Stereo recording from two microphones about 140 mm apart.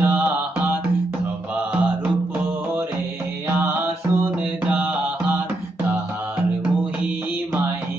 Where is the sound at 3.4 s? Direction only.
15° right (ahead or behind).